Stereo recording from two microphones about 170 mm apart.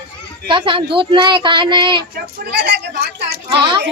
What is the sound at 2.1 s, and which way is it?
Speech, 70° right (ahead or behind).